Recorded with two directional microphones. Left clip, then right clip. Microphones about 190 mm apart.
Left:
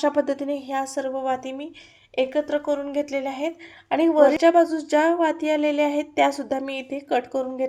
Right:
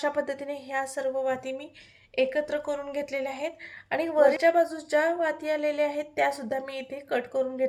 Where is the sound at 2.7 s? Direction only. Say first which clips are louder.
Left 6 dB; 45° left (ahead or behind).